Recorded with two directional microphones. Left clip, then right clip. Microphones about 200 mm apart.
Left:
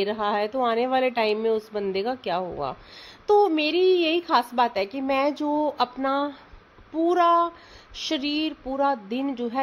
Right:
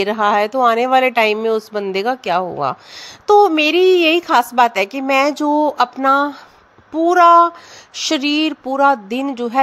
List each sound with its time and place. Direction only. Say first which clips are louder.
0.0 s speech: right 10 dB; 20° right (ahead or behind)